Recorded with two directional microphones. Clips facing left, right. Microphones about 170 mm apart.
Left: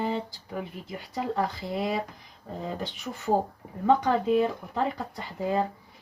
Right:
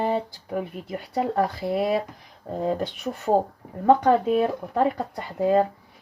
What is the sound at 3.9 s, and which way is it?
Speech, 55° right (ahead or behind).